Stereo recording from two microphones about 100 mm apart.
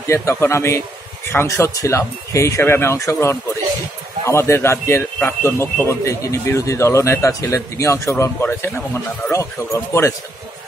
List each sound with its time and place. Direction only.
0.0 s a man's voice: 30° left (ahead or behind)